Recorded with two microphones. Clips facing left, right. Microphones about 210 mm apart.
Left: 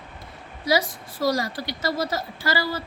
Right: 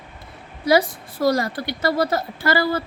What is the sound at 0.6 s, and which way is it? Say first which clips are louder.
A woman's voice: right 5 dB; 55° right (ahead or behind).